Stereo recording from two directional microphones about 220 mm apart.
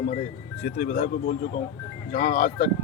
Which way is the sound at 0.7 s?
40° left (ahead or behind).